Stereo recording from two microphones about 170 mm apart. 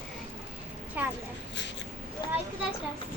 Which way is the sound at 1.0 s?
10° right (ahead or behind).